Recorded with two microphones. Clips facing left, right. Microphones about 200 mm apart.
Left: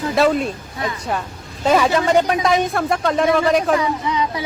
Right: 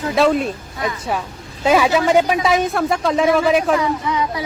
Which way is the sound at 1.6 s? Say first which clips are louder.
Right 1 dB; 5° right (ahead or behind).